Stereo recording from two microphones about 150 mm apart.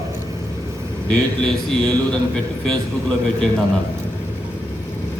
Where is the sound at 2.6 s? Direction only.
5° left (ahead or behind).